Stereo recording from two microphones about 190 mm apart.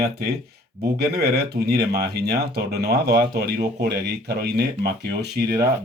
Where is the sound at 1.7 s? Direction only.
55° right (ahead or behind).